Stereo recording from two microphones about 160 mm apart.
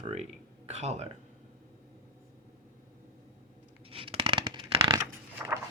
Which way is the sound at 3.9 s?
35° right (ahead or behind).